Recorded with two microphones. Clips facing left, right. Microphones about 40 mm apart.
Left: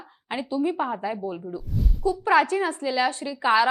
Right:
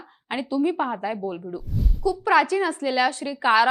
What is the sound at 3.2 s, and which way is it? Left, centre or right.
Speech, right.